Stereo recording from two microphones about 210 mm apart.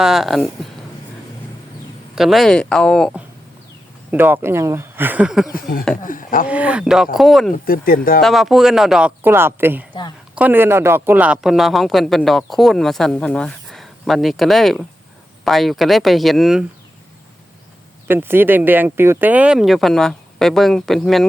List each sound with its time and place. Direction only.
0.0 s a man's voice: centre (ahead or behind)
2.1 s a man's voice: centre (ahead or behind)
5.5 s speech: 45° left (ahead or behind)
6.5 s a man's voice: 5° right (ahead or behind)
7.5 s speech: 45° left (ahead or behind)
8.2 s a man's voice: centre (ahead or behind)
18.1 s a man's voice: 10° right (ahead or behind)